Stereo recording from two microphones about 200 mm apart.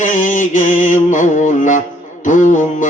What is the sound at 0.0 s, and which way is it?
Music, 40° left (ahead or behind).